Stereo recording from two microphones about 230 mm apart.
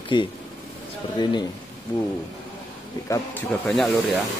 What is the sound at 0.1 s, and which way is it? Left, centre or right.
Speech, centre.